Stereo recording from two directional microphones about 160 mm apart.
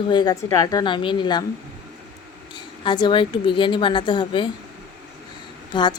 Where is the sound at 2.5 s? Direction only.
30° left (ahead or behind).